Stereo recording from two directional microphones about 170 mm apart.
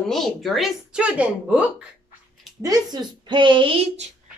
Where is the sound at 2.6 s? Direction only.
25° right (ahead or behind).